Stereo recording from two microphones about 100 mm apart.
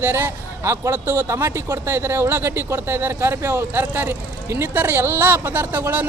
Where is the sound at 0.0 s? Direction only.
25° right (ahead or behind).